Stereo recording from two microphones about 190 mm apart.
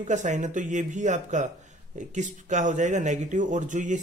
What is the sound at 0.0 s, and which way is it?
Speech, 40° right (ahead or behind).